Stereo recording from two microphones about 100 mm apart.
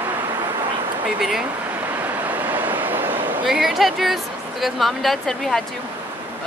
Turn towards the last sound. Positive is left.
turn(degrees=0)  # may be behind; listen again after turning